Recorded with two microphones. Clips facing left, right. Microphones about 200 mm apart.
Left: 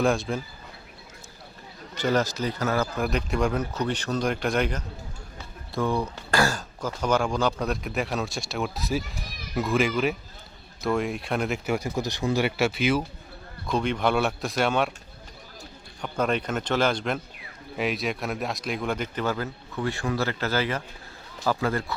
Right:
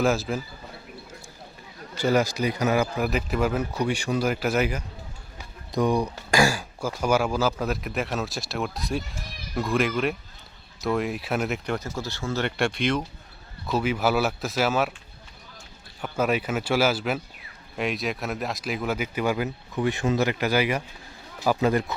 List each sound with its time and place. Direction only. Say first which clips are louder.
0.0 s speech: even; 5° right (ahead or behind)
2.0 s speech: right 2 dB; 10° right (ahead or behind)
5.4 s speech: right 3 dB; 15° right (ahead or behind); by 13.1 s 5° left (ahead or behind)
13.7 s speech: right 1 dB; 5° right (ahead or behind)
16.0 s speech: right 1 dB; 5° right (ahead or behind)